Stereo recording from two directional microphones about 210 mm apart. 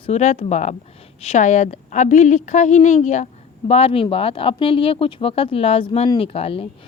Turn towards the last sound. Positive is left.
turn(degrees=25)  # may be behind; listen again after turning